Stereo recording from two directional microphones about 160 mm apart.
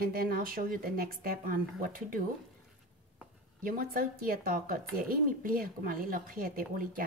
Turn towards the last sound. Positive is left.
turn(degrees=-60)  # may be behind; listen again after turning